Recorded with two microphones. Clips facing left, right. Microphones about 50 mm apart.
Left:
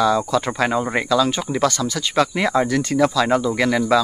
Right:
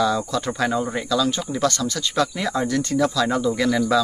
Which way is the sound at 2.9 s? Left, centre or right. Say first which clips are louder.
Left 3 dB; left.